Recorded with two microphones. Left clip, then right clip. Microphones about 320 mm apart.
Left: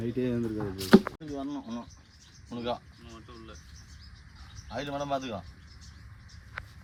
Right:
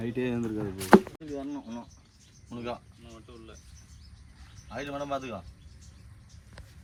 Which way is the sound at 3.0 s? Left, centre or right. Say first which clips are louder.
Left 1 dB; centre.